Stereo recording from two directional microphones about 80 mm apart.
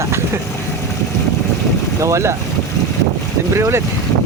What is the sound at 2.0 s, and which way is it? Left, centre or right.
Speech, right.